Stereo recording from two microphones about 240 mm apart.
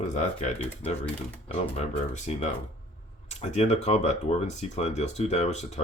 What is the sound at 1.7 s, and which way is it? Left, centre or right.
Speech, left.